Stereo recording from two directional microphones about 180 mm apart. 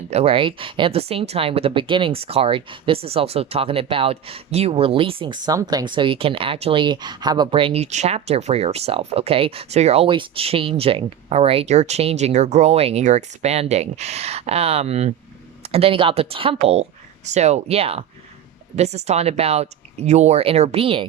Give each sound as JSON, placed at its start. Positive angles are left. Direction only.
{"t": 0.1, "sound": "speech", "side_deg": -35}